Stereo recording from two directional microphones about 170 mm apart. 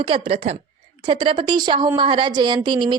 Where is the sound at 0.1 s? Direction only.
35° right (ahead or behind).